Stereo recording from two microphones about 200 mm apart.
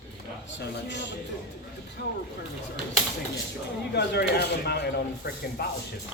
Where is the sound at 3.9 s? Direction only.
55° left (ahead or behind).